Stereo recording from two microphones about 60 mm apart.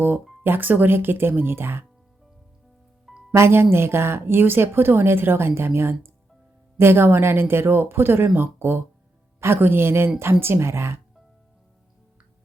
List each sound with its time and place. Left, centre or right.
0.4 s a woman's voice: right
3.3 s a woman's voice: right